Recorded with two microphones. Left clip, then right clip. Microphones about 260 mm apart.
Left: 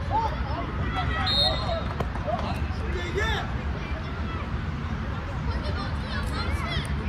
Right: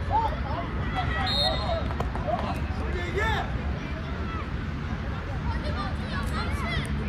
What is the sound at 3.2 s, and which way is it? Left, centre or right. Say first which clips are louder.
Hubbub: right 1 dB; right.